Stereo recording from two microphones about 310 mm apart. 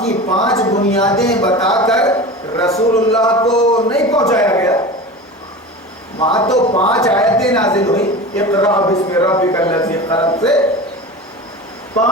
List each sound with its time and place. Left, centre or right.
0.0 s a man's voice: centre
6.1 s a man's voice: centre